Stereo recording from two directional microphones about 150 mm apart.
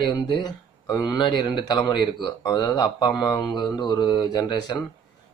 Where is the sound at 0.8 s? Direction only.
30° left (ahead or behind).